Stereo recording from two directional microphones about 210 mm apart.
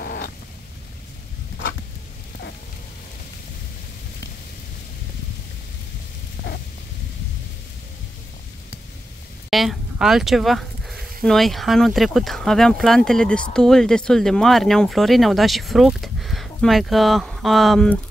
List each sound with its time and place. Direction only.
0.0 s cat: 45° left (ahead or behind)
9.5 s a sound: centre (ahead or behind)
11.2 s speech: centre (ahead or behind)